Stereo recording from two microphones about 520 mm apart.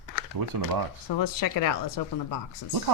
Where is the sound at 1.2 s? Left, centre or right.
Left.